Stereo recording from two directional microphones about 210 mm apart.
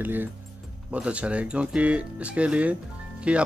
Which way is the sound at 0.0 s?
10° right (ahead or behind).